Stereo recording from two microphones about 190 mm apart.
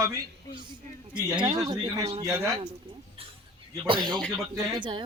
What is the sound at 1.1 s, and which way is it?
Speech, 20° right (ahead or behind).